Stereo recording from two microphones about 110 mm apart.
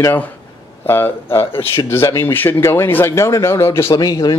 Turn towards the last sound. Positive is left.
turn(degrees=35)  # may be behind; listen again after turning